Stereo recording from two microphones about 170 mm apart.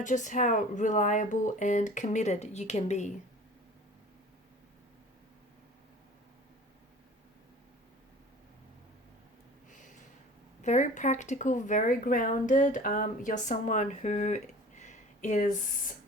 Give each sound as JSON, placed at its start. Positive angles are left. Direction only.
{"t": 0.0, "sound": "speech", "side_deg": 45}
{"t": 10.6, "sound": "speech", "side_deg": 45}